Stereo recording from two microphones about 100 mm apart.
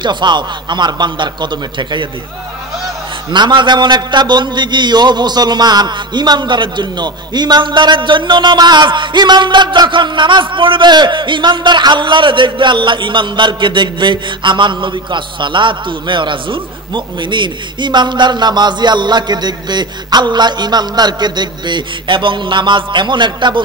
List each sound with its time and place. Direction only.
0.0 s a man's voice: 50° right (ahead or behind)
3.3 s a man's voice: 50° right (ahead or behind)